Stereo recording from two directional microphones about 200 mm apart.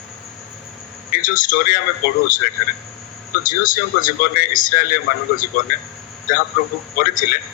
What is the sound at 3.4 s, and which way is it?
A man's voice, 40° left (ahead or behind).